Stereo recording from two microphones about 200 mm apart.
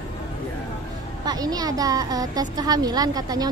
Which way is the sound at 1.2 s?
20° right (ahead or behind).